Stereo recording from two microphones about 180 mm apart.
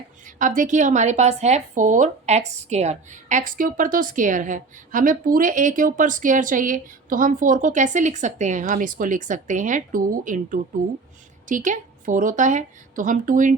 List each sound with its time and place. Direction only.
0.3 s speech: 45° right (ahead or behind)